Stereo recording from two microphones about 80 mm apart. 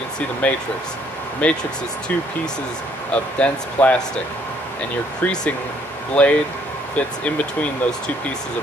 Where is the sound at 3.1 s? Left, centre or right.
Centre.